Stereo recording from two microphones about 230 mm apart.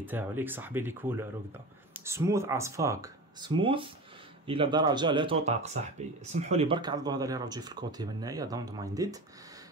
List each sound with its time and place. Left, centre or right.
0.0 s speech: centre